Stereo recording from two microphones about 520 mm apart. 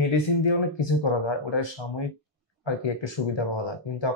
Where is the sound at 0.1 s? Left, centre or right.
Left.